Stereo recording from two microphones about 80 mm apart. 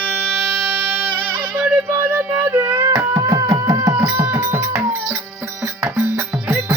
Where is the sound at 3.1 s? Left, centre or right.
Right.